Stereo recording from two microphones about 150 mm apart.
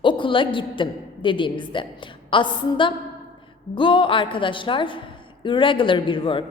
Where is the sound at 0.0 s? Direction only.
35° left (ahead or behind).